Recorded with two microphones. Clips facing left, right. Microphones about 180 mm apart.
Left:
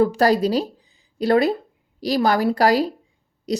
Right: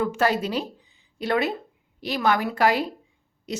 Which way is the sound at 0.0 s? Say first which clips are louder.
Left 6 dB; 35° left (ahead or behind).